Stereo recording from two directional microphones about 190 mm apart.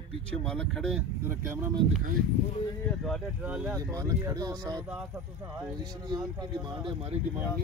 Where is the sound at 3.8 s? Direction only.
15° right (ahead or behind).